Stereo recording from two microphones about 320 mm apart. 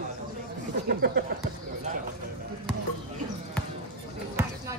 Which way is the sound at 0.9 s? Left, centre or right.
Right.